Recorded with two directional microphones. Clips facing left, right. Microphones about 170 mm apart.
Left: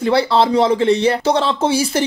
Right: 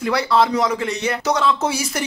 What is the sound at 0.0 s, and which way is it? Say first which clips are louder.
Speech: left 3 dB; 30° left (ahead or behind).